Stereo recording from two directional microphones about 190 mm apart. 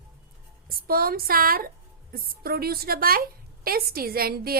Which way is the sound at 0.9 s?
50° right (ahead or behind).